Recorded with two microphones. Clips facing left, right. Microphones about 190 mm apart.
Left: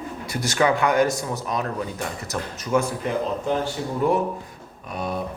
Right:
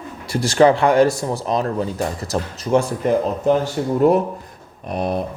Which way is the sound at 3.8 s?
50° right (ahead or behind).